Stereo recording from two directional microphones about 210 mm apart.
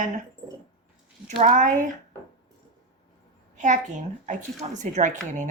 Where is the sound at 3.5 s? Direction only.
35° right (ahead or behind).